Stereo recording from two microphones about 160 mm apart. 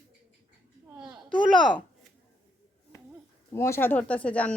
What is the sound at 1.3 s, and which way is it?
Speech, 30° left (ahead or behind).